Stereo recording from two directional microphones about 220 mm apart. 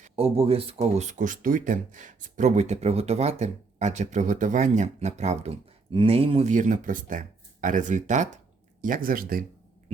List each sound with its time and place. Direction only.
0.0 s speech: 25° right (ahead or behind)